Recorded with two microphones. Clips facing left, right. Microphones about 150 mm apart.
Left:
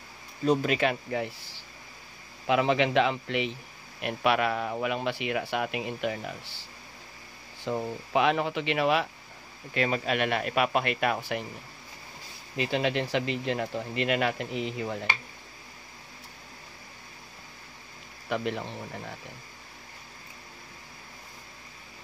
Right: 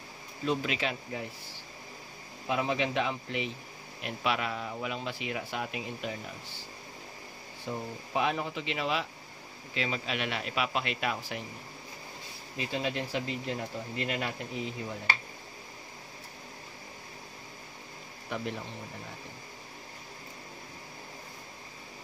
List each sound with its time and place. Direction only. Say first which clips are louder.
0.5 s a man's voice: left 6 dB; 45° left (ahead or behind)
2.4 s a man's voice: left 6 dB; 90° left
4.0 s speech: left 6 dB; 60° left (ahead or behind)
7.6 s a man's voice: left 6 dB; 90° left; by 11.4 s 60° left (ahead or behind)
12.5 s speech: left 6 dB; 80° left
18.3 s speech: left 6 dB; 80° left